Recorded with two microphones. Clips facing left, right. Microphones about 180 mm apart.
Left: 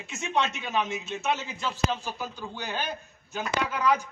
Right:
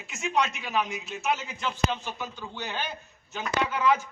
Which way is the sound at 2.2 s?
10° left (ahead or behind).